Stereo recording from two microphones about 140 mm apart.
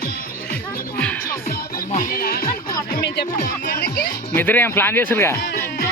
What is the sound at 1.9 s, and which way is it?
Music, 80° left.